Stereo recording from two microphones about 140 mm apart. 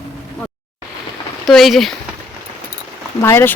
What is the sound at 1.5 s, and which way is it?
Speech, centre (ahead or behind).